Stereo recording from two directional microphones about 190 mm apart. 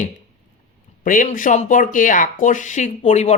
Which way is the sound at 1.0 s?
45° left (ahead or behind).